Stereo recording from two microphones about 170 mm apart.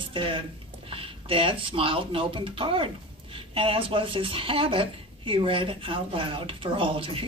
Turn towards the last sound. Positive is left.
turn(degrees=-30)  # may be behind; listen again after turning